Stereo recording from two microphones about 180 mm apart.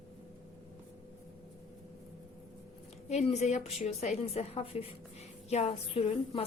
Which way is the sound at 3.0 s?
40° left (ahead or behind).